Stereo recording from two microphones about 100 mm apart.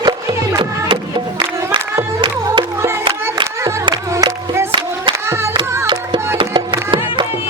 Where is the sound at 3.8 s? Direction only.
55° right (ahead or behind).